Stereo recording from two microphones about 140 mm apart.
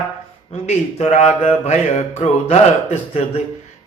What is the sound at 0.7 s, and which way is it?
Speech, 55° left (ahead or behind).